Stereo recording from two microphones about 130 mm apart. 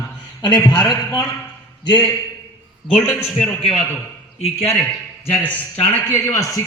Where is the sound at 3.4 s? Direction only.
5° left (ahead or behind).